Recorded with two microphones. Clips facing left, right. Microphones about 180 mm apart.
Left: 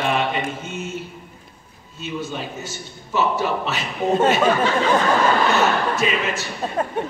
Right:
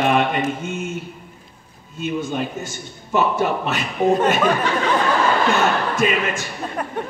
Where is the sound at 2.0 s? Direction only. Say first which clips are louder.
Right 5 dB; 50° right (ahead or behind).